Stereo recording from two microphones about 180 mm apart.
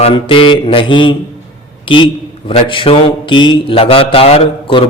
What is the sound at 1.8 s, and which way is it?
Mantra, 30° left (ahead or behind).